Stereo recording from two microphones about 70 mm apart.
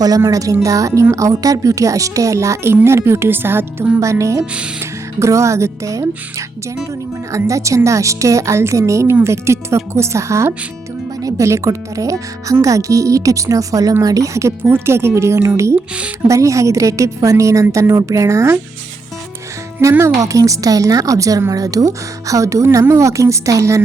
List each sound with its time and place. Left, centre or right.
0.3 s a woman's voice: right
4.0 s a woman's voice: right
7.3 s a woman's voice: right
11.2 s music: right
11.4 s a woman's voice: right
19.8 s speech: right
20.1 s a woman's voice: right